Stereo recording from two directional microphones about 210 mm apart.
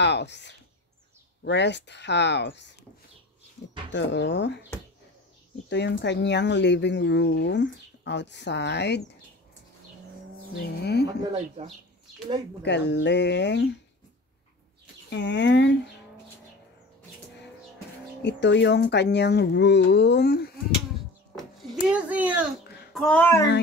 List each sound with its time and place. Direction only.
0.0 s speech: 55° left (ahead or behind)
3.9 s speech: 55° left (ahead or behind)
5.7 s speech: 55° left (ahead or behind)
10.8 s speech: 50° left (ahead or behind)
12.6 s speech: 55° left (ahead or behind)
15.0 s speech: 55° left (ahead or behind)
18.2 s speech: 55° left (ahead or behind)
21.4 s a sound: centre (ahead or behind)
22.9 s a child's voice: 5° left (ahead or behind)